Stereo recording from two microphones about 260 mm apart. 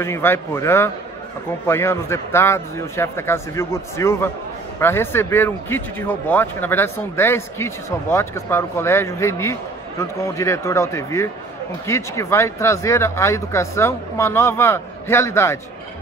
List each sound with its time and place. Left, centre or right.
0.0 s speech: centre